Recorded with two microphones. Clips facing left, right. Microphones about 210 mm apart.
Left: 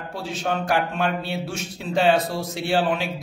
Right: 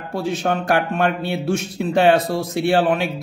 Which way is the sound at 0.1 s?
55° right (ahead or behind).